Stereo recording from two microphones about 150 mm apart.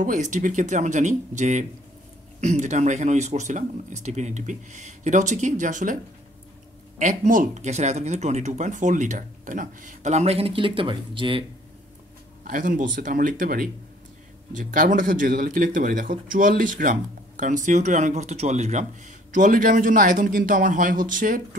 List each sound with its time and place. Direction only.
0.0 s speech: 55° right (ahead or behind)
7.0 s speech: 60° right (ahead or behind); by 11.4 s 35° right (ahead or behind)
12.4 s speech: 65° right (ahead or behind)